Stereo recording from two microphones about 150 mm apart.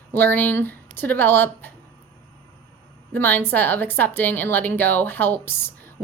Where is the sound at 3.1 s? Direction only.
10° left (ahead or behind).